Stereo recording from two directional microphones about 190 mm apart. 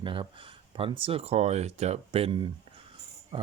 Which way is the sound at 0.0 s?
25° right (ahead or behind).